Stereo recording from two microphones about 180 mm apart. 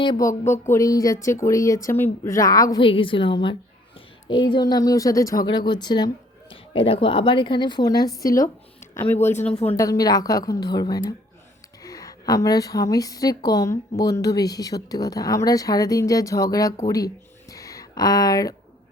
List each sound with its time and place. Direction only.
0.0 s a woman's voice: 20° left (ahead or behind)
9.3 s speech: 35° left (ahead or behind)
9.6 s a woman's voice: 20° left (ahead or behind)
17.5 s a sound: 20° left (ahead or behind)